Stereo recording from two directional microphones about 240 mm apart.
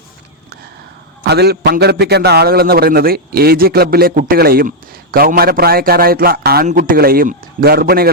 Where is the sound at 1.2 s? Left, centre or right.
Right.